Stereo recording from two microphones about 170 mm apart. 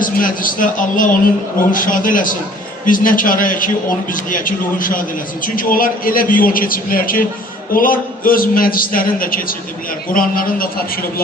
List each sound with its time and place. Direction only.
0.0 s a man's voice: 55° left (ahead or behind)